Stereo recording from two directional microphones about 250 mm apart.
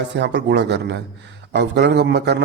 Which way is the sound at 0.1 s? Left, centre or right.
Right.